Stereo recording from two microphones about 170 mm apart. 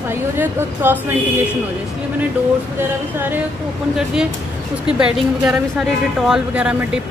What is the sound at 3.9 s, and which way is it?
A woman's voice, 5° right (ahead or behind).